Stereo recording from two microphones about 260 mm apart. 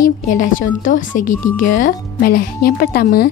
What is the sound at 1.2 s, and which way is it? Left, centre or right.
Speech, left.